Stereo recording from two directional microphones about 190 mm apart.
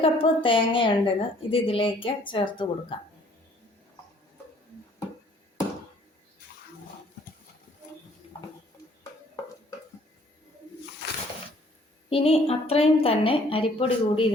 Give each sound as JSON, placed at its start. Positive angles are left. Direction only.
{"t": 0.0, "sound": "a woman's voice", "side_deg": 30}
{"t": 12.0, "sound": "a woman's voice", "side_deg": 30}